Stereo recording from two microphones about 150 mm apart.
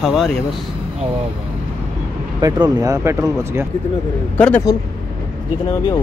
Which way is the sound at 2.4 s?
25° right (ahead or behind).